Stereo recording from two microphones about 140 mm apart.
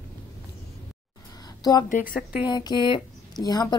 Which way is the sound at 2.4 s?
30° left (ahead or behind).